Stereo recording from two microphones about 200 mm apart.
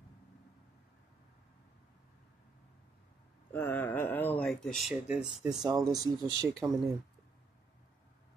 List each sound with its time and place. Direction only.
3.5 s a sound: 10° left (ahead or behind)
4.1 s speech: 10° left (ahead or behind)
5.7 s speech: 20° right (ahead or behind)